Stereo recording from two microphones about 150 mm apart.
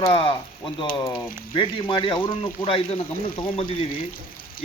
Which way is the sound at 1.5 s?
30° left (ahead or behind).